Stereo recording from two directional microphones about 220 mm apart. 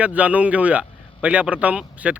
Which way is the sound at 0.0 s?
5° right (ahead or behind).